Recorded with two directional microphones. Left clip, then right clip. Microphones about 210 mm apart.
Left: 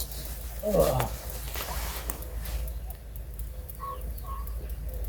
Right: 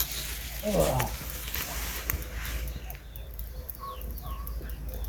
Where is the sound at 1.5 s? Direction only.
20° left (ahead or behind).